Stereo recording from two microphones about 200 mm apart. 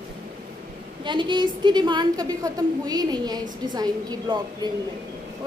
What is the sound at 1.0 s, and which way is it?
A woman's voice, 25° right (ahead or behind).